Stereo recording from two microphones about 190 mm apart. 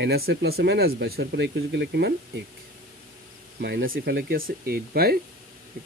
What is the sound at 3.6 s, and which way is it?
Speech, 60° right (ahead or behind).